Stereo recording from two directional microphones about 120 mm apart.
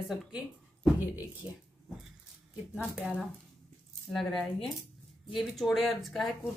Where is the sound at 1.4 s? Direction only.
10° right (ahead or behind).